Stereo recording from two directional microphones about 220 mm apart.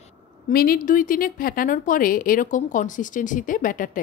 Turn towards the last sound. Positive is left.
turn(degrees=40)  # may be behind; listen again after turning